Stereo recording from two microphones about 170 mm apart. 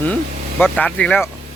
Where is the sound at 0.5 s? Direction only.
5° left (ahead or behind).